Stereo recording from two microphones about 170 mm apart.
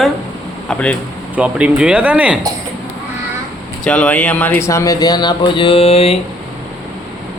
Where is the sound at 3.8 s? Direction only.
5° left (ahead or behind); by 6.2 s 35° left (ahead or behind).